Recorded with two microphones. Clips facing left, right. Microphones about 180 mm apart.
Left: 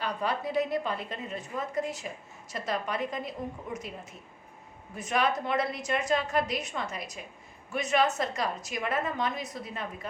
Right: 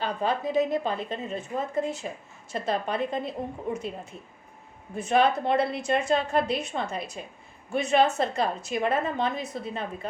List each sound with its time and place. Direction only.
0.0 s a woman's voice: 25° right (ahead or behind)